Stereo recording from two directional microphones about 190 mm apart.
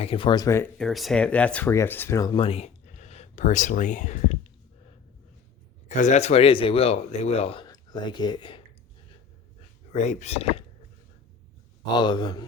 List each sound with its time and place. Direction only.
0.0 s speech: 30° left (ahead or behind)
0.8 s speech: centre (ahead or behind); by 4.4 s 35° left (ahead or behind)
5.9 s speech: 40° left (ahead or behind)
9.9 s speech: 35° left (ahead or behind)
11.9 s speech: 25° left (ahead or behind)